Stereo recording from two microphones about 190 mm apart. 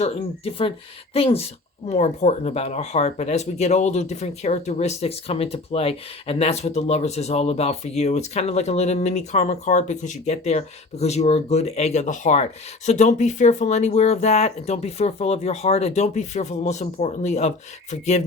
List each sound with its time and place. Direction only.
0.0 s speech: 30° left (ahead or behind)